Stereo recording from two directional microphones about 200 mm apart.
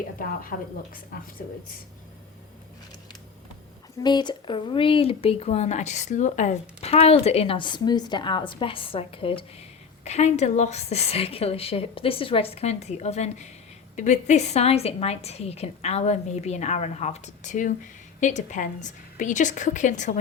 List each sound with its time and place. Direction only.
0.2 s a woman's voice: 45° left (ahead or behind)
4.0 s a woman's voice: 20° left (ahead or behind); by 20.1 s 40° left (ahead or behind)